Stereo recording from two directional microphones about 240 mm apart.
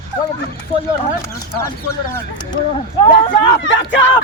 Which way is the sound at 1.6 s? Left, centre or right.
Centre.